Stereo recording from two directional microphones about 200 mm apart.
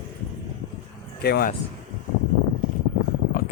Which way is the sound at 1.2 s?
50° left (ahead or behind).